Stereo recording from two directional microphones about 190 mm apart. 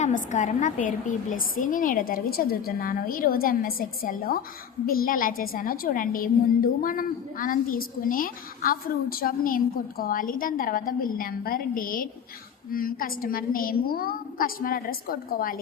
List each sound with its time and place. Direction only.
0.0 s a woman's voice: 40° left (ahead or behind)